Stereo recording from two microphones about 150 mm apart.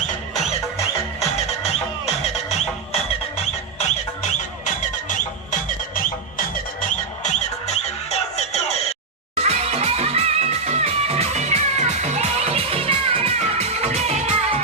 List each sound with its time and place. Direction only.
2.0 s music: 45° left (ahead or behind); by 6.4 s 65° left (ahead or behind)
7.2 s music: 50° left (ahead or behind)
9.3 s music: 45° right (ahead or behind)